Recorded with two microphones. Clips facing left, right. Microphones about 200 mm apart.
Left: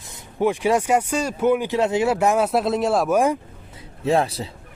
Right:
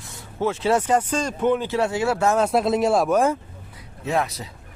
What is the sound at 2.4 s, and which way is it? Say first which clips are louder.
Speech: right 1 dB; centre (ahead or behind).